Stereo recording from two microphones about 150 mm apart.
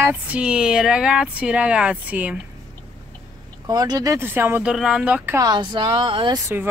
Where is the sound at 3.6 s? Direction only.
25° right (ahead or behind).